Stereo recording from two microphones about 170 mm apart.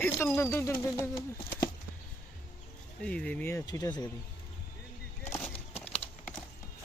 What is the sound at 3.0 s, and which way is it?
Speech, 5° left (ahead or behind).